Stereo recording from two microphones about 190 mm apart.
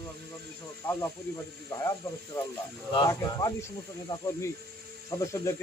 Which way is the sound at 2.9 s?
20° left (ahead or behind).